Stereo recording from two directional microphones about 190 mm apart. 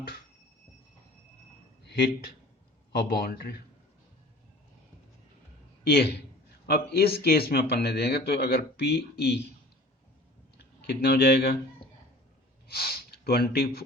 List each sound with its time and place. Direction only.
1.8 s a man's voice: 60° left (ahead or behind)
5.8 s a man's voice: 55° left (ahead or behind)
10.6 s speech: 60° left (ahead or behind)
12.6 s speech: 55° left (ahead or behind)